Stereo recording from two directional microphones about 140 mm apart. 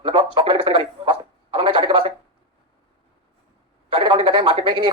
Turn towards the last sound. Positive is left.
turn(degrees=-40)  # may be behind; listen again after turning